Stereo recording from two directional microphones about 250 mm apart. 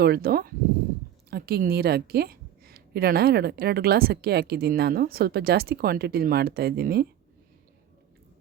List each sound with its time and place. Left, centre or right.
0.0 s a woman's voice: right